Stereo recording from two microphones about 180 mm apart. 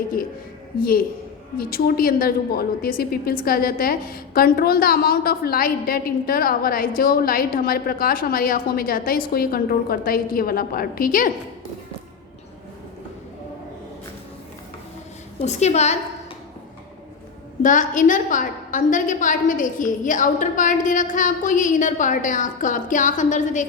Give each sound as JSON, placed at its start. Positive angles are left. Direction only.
{"t": 0.8, "sound": "a woman's voice", "side_deg": 55}
{"t": 15.4, "sound": "a woman's voice", "side_deg": 40}
{"t": 17.6, "sound": "a woman's voice", "side_deg": 45}